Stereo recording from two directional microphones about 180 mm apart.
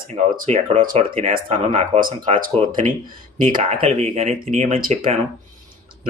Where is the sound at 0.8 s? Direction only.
50° right (ahead or behind).